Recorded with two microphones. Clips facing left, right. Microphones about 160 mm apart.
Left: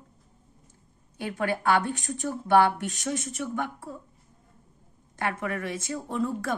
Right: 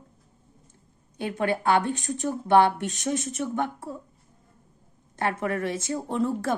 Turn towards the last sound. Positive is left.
turn(degrees=-30)  # may be behind; listen again after turning